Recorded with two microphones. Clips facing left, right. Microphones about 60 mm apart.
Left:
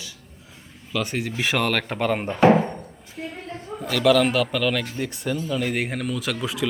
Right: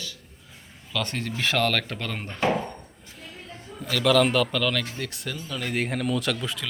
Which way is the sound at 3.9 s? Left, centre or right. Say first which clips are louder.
Left 2 dB; centre.